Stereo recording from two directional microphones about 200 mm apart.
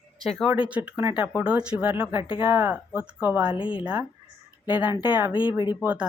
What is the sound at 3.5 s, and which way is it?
Speech, 25° left (ahead or behind).